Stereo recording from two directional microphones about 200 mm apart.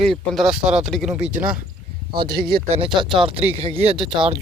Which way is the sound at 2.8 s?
25° right (ahead or behind).